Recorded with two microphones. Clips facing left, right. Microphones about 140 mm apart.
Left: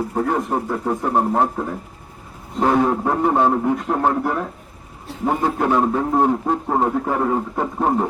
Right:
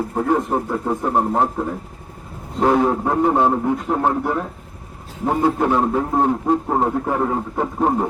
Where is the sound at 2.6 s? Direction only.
10° right (ahead or behind).